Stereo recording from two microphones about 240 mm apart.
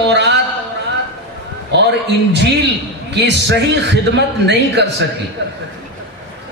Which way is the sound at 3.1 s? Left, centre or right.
Right.